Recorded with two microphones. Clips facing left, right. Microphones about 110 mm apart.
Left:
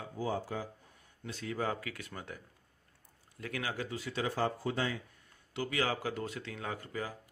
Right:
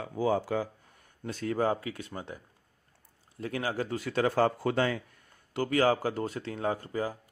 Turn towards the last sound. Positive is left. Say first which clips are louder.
# right 8 dB
turn(degrees=-35)  # may be behind; listen again after turning